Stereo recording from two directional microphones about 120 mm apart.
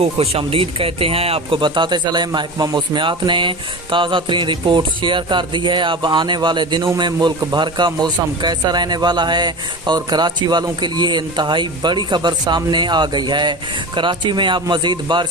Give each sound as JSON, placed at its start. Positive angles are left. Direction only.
{"t": 0.0, "sound": "speech", "side_deg": -55}